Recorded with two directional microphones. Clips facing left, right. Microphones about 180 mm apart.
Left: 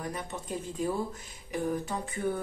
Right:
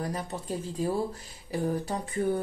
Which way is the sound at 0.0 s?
35° right (ahead or behind).